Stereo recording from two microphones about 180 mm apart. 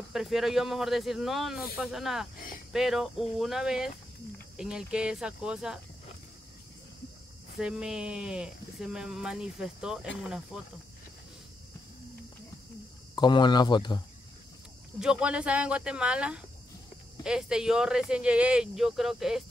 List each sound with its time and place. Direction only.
0.1 s speech: centre (ahead or behind)
7.6 s speech: 5° right (ahead or behind)
13.1 s speech: 25° left (ahead or behind)
15.0 s speech: 5° right (ahead or behind)